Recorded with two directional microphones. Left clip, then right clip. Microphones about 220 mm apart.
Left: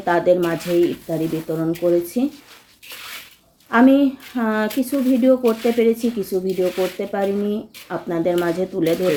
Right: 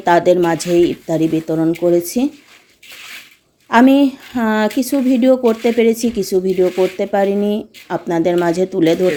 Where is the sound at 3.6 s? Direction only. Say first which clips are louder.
Right 4 dB; 50° right (ahead or behind).